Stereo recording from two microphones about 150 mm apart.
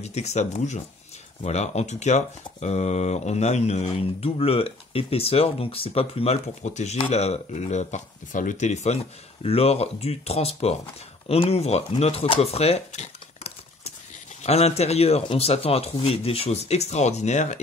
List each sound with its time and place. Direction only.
0.0 s speech: 45° left (ahead or behind)